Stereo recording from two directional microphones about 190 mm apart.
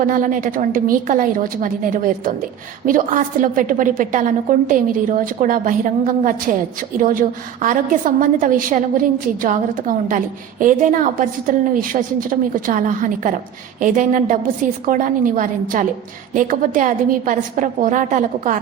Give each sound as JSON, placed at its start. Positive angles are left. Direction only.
{"t": 0.0, "sound": "a woman's voice", "side_deg": -45}